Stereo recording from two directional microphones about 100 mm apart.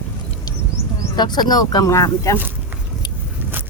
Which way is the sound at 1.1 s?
45° left (ahead or behind).